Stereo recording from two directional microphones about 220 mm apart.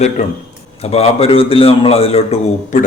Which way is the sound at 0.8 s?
25° left (ahead or behind).